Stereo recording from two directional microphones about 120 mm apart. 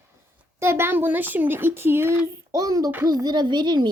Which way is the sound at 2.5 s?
30° right (ahead or behind).